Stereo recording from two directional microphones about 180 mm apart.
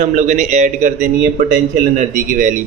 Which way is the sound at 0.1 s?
45° right (ahead or behind).